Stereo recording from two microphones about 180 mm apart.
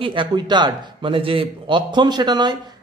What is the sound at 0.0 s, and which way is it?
A man's voice, 25° right (ahead or behind).